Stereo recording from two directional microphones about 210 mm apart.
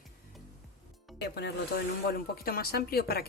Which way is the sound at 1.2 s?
50° left (ahead or behind).